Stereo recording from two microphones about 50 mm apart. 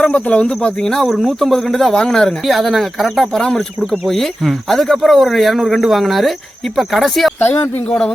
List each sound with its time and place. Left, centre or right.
0.0 s speech: left; by 1.0 s centre
1.0 s speech: centre
4.0 s speech: centre
7.3 s speech: left
7.9 s speech: left